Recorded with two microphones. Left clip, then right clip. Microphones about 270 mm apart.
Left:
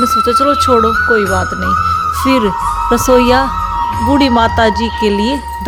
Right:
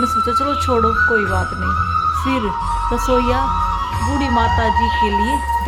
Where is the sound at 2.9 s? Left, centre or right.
Left.